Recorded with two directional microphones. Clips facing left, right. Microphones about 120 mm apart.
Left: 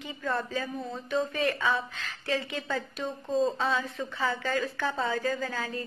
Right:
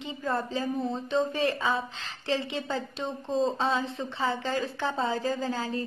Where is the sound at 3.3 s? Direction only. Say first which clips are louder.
Even; centre (ahead or behind).